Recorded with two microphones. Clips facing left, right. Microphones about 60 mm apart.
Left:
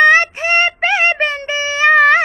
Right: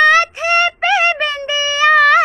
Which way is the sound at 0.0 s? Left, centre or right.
Left.